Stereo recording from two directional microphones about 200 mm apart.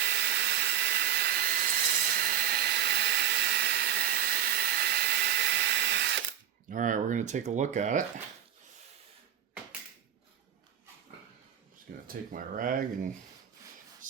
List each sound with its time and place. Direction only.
0.0 s hair dryer: 60° right (ahead or behind)
6.7 s speech: 40° right (ahead or behind)
12.0 s speech: 45° right (ahead or behind)
14.0 s whispering: 40° right (ahead or behind)